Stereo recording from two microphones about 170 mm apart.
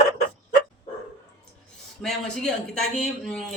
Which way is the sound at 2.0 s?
5° left (ahead or behind).